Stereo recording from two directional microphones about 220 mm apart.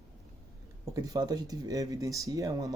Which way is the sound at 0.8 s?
15° right (ahead or behind).